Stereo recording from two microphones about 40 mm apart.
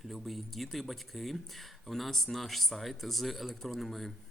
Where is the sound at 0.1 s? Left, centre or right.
Centre.